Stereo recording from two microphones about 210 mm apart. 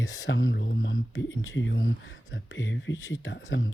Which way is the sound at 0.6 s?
50° left (ahead or behind).